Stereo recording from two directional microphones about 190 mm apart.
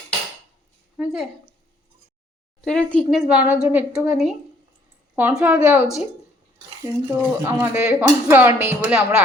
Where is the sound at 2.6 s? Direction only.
5° left (ahead or behind).